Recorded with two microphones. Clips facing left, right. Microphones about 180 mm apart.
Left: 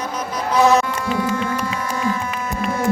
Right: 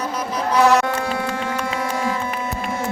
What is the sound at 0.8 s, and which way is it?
Music, 70° right (ahead or behind).